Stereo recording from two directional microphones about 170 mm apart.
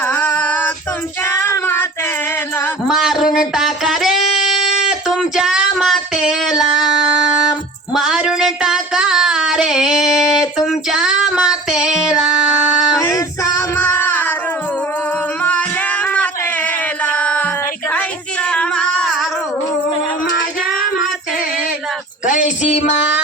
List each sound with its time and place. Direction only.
0.0 s female singing: 10° left (ahead or behind)
1.3 s child singing: 15° left (ahead or behind)
2.8 s a sound: centre (ahead or behind)
3.3 s singing: centre (ahead or behind)
7.9 s a sound: centre (ahead or behind)
13.0 s male singing: 20° left (ahead or behind)
17.1 s music: 10° left (ahead or behind)
18.5 s singing: 5° left (ahead or behind)
22.3 s music: 45° left (ahead or behind)